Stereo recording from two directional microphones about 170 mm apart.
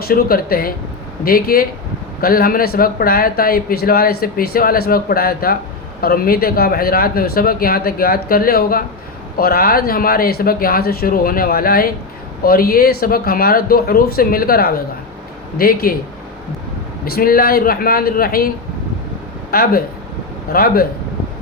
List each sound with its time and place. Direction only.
0.1 s speech: 60° left (ahead or behind)
17.1 s speech: 60° left (ahead or behind)
19.5 s speech: 60° left (ahead or behind)